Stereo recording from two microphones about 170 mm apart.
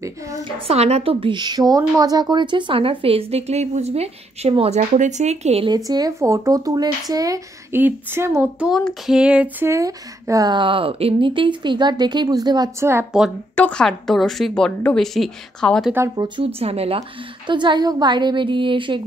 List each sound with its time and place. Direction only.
0.7 s a woman's voice: 40° right (ahead or behind)
5.9 s speech: 20° right (ahead or behind)
13.6 s a woman's voice: 5° left (ahead or behind)
16.2 s a woman's voice: 30° right (ahead or behind)